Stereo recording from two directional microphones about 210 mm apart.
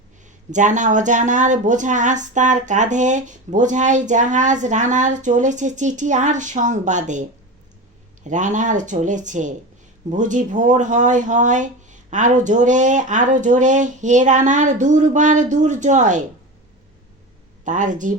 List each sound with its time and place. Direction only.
0.5 s speech: 35° right (ahead or behind)
17.7 s speech: 35° right (ahead or behind)